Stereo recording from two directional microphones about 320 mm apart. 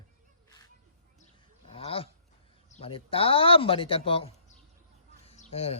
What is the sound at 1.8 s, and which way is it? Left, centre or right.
Speech, centre.